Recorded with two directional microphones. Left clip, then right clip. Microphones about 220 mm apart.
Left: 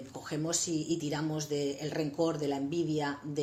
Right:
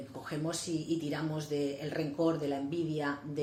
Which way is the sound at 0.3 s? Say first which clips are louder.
Left 3 dB; 40° left (ahead or behind).